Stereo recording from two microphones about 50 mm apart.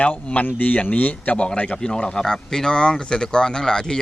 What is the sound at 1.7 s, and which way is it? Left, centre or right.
Speech, centre.